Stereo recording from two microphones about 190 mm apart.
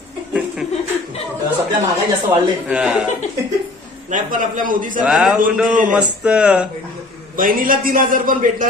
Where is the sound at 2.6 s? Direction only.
5° right (ahead or behind).